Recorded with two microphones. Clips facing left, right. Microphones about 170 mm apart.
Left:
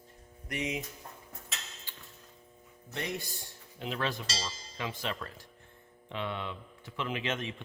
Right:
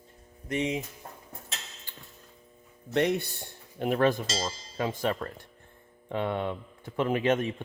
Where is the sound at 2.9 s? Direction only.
65° right (ahead or behind).